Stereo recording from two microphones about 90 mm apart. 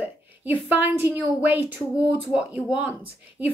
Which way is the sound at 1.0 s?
20° right (ahead or behind).